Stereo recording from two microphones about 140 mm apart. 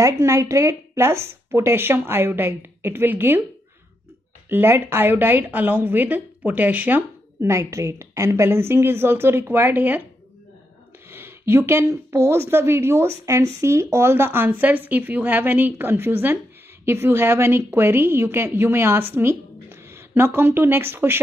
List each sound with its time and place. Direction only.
0.0 s a woman's voice: 20° right (ahead or behind)
4.5 s a woman's voice: 15° right (ahead or behind)
11.1 s a sound: 15° right (ahead or behind)
12.3 s a woman's voice: 15° right (ahead or behind)